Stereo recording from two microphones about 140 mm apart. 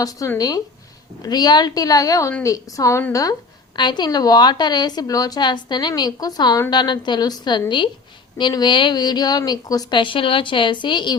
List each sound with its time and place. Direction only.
0.0 s a woman's voice: 25° left (ahead or behind)